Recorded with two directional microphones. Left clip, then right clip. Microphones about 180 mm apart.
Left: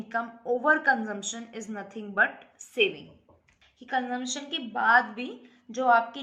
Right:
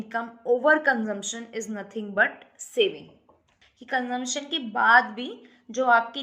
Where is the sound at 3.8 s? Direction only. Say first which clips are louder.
Right 2 dB; 20° right (ahead or behind).